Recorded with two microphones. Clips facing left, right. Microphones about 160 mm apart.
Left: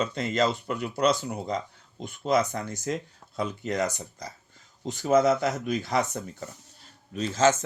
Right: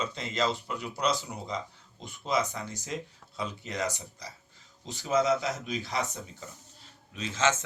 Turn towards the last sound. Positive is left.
turn(degrees=40)  # may be behind; listen again after turning